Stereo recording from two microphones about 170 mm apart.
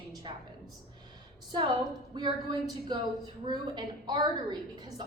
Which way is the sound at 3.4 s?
25° right (ahead or behind).